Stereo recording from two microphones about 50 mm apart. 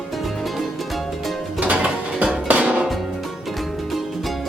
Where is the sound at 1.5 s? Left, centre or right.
Right.